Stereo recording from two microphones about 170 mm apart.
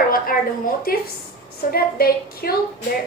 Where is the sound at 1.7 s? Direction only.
60° left (ahead or behind).